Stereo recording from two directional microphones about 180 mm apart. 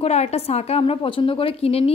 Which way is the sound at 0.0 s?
35° left (ahead or behind).